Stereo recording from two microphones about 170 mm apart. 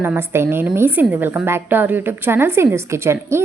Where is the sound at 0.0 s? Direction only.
15° right (ahead or behind).